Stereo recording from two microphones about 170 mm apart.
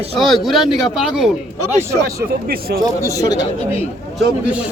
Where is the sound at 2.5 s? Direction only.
65° right (ahead or behind).